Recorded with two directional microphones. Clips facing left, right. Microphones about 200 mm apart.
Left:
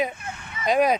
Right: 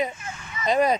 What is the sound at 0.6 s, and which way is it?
Speech, 10° left (ahead or behind).